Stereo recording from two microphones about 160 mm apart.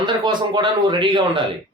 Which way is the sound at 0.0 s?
30° right (ahead or behind).